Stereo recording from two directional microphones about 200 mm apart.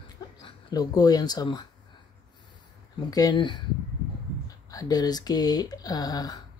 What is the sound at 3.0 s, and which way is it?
Speech, 20° left (ahead or behind).